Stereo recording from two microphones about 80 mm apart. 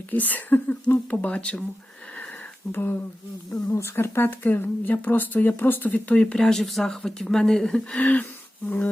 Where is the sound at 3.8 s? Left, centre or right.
Left; by 8.0 s centre.